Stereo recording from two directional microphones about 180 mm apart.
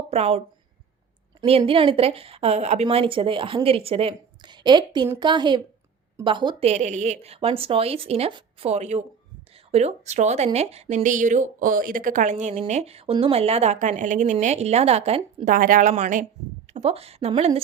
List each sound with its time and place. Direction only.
0.1 s a woman's voice: 35° right (ahead or behind)
1.5 s a woman's voice: 30° right (ahead or behind)
6.7 s speech: 40° right (ahead or behind)
15.4 s a woman's voice: 50° right (ahead or behind); by 17.6 s 35° right (ahead or behind)